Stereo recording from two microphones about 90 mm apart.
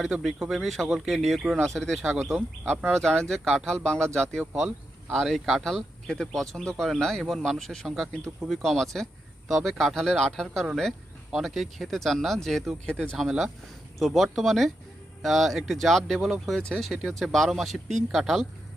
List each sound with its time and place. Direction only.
0.0 s speech: centre (ahead or behind)
13.2 s speech: 5° right (ahead or behind)